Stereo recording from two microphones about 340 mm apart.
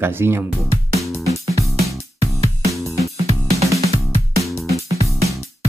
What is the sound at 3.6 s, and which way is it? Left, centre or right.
Music, centre.